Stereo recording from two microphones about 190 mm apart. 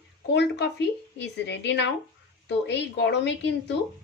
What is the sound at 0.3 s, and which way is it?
A woman's voice, 65° left (ahead or behind).